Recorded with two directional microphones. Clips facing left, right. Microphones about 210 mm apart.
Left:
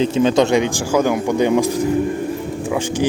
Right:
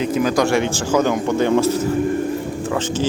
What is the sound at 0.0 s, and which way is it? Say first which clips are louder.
A man's voice: left 3 dB; 25° left (ahead or behind).